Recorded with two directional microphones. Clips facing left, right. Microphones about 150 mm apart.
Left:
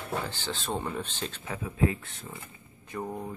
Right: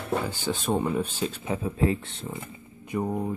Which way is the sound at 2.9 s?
15° right (ahead or behind).